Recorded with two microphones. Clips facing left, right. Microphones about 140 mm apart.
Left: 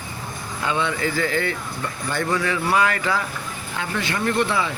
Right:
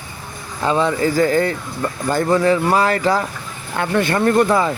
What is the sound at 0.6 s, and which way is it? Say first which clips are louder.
Speech: right 7 dB; 35° right (ahead or behind).